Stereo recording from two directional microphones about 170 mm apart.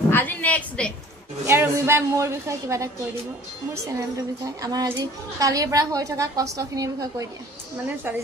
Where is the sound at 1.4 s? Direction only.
15° right (ahead or behind).